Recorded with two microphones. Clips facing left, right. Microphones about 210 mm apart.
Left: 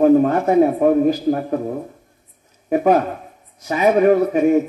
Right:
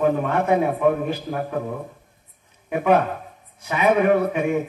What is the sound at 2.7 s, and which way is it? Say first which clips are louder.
Speech: left 3 dB; 40° left (ahead or behind).